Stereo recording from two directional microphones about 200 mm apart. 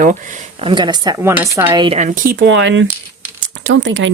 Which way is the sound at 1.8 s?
35° right (ahead or behind).